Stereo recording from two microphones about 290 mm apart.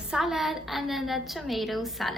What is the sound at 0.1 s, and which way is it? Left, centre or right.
A woman's voice, centre.